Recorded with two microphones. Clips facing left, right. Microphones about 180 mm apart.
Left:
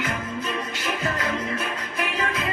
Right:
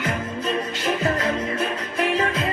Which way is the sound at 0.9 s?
30° right (ahead or behind).